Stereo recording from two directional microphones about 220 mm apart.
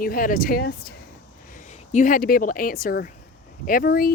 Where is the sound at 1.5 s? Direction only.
35° left (ahead or behind).